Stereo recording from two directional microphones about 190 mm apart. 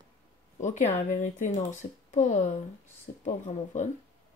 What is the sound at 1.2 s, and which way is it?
Speech, 40° left (ahead or behind).